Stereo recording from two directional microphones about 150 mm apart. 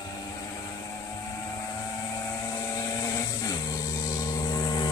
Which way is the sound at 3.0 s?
25° left (ahead or behind).